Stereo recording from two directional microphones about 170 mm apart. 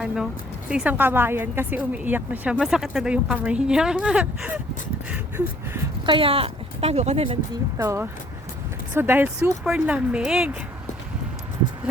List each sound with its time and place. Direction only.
0.7 s a woman's voice: 5° right (ahead or behind)
6.1 s speech: 30° right (ahead or behind)
7.8 s a woman's voice: 15° right (ahead or behind)